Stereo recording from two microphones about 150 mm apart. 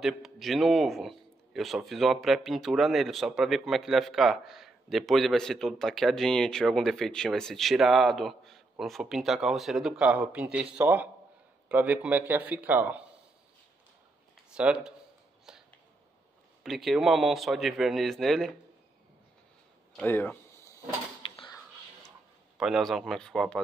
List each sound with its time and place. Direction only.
0.0 s a man's voice: centre (ahead or behind)
14.5 s speech: 5° right (ahead or behind)
15.5 s a sound: 5° right (ahead or behind)
16.6 s a man's voice: centre (ahead or behind)
20.0 s speech: 10° left (ahead or behind)
21.2 s a sound: 35° left (ahead or behind)
22.6 s a man's voice: centre (ahead or behind)